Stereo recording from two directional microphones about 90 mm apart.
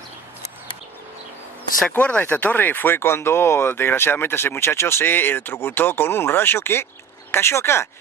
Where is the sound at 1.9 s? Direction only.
15° left (ahead or behind).